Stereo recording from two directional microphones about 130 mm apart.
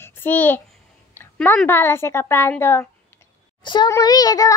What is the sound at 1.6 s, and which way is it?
Speech, 15° left (ahead or behind).